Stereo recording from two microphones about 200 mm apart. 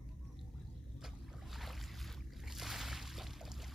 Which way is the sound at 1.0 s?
Centre (ahead or behind).